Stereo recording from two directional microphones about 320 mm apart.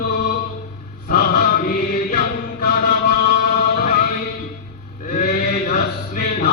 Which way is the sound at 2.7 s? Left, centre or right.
Left.